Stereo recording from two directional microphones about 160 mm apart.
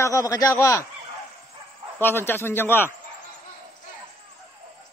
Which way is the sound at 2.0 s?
15° left (ahead or behind).